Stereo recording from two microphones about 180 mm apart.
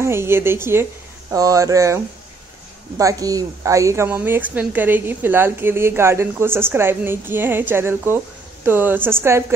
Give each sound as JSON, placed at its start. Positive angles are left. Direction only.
{"t": 0.0, "sound": "a woman's voice", "side_deg": -15}
{"t": 3.0, "sound": "a woman's voice", "side_deg": -20}